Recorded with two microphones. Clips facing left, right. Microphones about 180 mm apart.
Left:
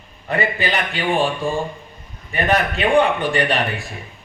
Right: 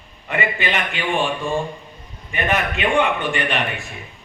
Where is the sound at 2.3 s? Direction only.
35° left (ahead or behind).